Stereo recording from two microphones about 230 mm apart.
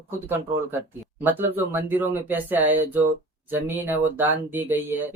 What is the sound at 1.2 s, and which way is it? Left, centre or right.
Speech, centre.